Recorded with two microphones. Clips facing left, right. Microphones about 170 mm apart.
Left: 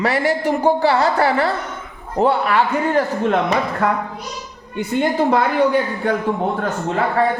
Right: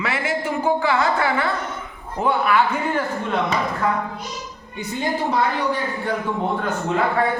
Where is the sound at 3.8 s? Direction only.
65° left (ahead or behind).